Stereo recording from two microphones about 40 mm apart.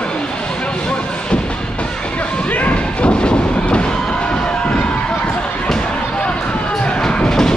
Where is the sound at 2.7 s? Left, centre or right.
Left.